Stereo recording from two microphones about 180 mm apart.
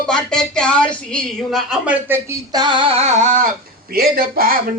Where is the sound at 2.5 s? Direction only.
25° right (ahead or behind); by 3.5 s 45° right (ahead or behind).